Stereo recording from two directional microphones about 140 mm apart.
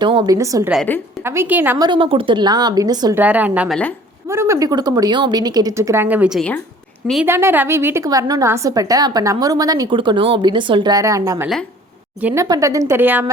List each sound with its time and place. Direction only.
0.0 s a woman's voice: 40° right (ahead or behind)
0.3 s a woman's voice: 25° right (ahead or behind)
0.9 s a woman's voice: 15° left (ahead or behind)
1.2 s a woman's voice: 15° right (ahead or behind)
1.8 s a woman's voice: 35° right (ahead or behind)
3.2 s a woman's voice: 10° right (ahead or behind)
4.3 s a woman's voice: 20° right (ahead or behind)